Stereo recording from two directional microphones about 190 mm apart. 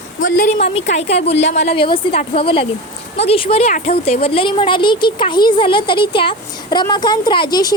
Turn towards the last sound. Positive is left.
turn(degrees=25)  # may be behind; listen again after turning